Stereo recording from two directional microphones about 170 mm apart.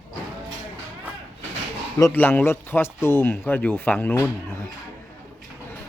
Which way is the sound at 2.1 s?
10° left (ahead or behind).